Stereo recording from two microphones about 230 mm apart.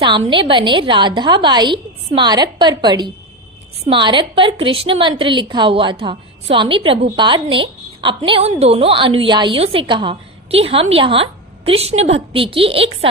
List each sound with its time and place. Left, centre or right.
0.0 s a woman's voice: right